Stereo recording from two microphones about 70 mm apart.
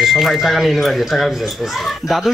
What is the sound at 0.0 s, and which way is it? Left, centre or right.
Speech, centre.